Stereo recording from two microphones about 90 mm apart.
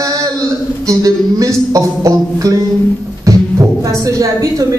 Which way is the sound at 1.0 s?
40° right (ahead or behind).